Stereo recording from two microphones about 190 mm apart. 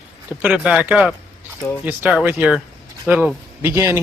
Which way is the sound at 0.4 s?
5° right (ahead or behind).